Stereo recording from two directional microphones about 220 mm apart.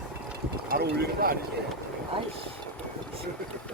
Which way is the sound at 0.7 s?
45° right (ahead or behind).